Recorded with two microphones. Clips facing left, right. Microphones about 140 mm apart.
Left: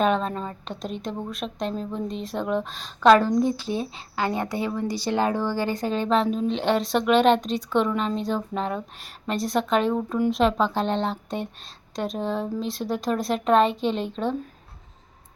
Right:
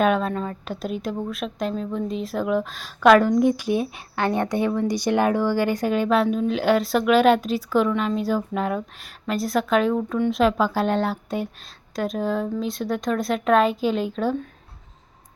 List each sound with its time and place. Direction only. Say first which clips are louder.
0.0 s a woman's voice: right 2 dB; 5° right (ahead or behind)
3.2 s speech: right 4 dB; 15° right (ahead or behind)
3.9 s speech: right 3 dB; 20° left (ahead or behind)
4.9 s a woman's voice: right 3 dB; 15° right (ahead or behind)